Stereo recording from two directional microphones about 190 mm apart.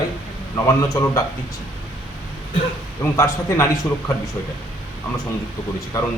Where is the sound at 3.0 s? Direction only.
15° left (ahead or behind).